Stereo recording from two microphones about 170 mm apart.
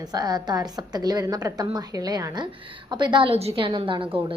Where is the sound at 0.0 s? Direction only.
25° right (ahead or behind).